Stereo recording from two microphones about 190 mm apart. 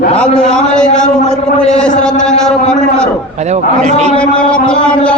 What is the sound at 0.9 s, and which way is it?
Speech, 40° left (ahead or behind).